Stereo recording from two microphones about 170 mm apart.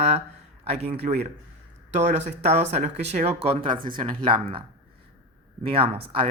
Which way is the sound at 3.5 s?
30° right (ahead or behind).